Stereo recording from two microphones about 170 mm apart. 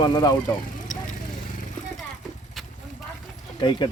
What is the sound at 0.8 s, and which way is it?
Vehicle, 50° left (ahead or behind).